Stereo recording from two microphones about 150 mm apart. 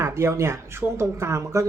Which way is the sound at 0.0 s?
15° right (ahead or behind).